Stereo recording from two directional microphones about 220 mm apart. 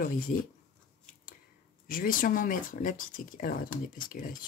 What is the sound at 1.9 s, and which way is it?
Speech, 40° left (ahead or behind).